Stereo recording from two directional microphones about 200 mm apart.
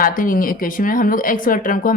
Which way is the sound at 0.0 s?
45° left (ahead or behind).